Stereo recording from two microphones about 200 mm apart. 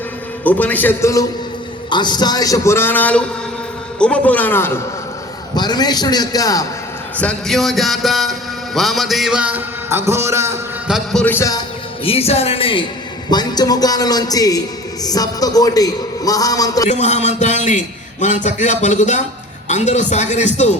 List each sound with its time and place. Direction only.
0.4 s a man's voice: 10° left (ahead or behind)
7.2 s a man's voice: 5° left (ahead or behind); by 10.6 s 15° right (ahead or behind)
10.8 s a man's voice: centre (ahead or behind)
12.0 s a man's voice: 30° left (ahead or behind)
16.9 s a man's voice: 35° left (ahead or behind)